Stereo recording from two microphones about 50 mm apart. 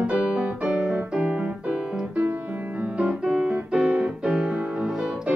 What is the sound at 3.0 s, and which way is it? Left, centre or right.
Piano, right.